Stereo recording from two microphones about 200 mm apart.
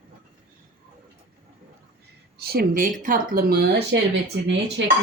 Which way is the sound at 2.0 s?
50° right (ahead or behind).